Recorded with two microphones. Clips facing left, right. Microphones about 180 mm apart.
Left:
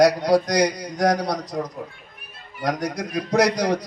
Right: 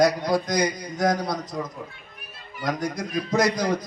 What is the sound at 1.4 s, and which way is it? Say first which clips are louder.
A man's voice: left 3 dB; 35° left (ahead or behind).